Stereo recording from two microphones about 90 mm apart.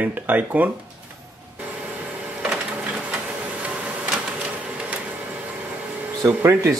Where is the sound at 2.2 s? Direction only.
15° right (ahead or behind).